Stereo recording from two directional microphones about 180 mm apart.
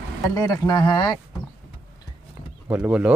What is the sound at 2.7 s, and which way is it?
Speech, 10° right (ahead or behind).